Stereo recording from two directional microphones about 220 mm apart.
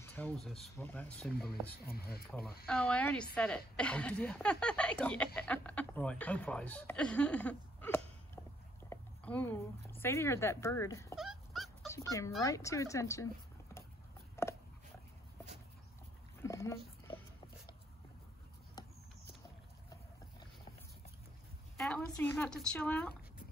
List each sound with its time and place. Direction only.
0.0 s speech: 5° left (ahead or behind)
1.9 s speech: 45° left (ahead or behind)
2.6 s speech: 5° left (ahead or behind)
11.1 s dog: centre (ahead or behind)
11.9 s speech: 15° left (ahead or behind)
14.4 s dog: 10° left (ahead or behind)
16.4 s dog: 15° left (ahead or behind)
21.7 s speech: 5° left (ahead or behind)